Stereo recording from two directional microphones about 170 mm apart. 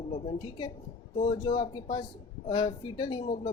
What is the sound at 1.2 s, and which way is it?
Speech, 30° left (ahead or behind).